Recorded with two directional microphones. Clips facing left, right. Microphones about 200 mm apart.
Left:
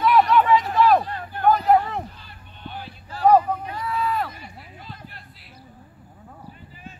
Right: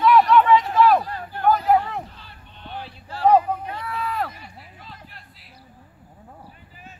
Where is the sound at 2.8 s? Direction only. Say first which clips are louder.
Left 1 dB; 30° right (ahead or behind).